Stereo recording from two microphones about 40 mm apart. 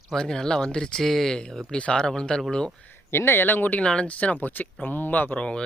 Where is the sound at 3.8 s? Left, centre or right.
Left.